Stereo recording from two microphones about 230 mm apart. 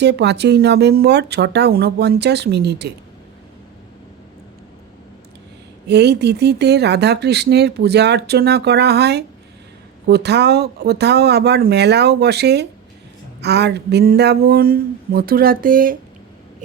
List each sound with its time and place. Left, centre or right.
0.0 s speech: right
5.9 s speech: right
13.4 s a sound: right